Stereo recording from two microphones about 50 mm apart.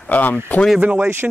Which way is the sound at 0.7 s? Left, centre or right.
Right.